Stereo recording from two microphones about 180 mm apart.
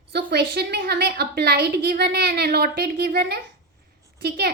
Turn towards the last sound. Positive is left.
turn(degrees=-65)  # may be behind; listen again after turning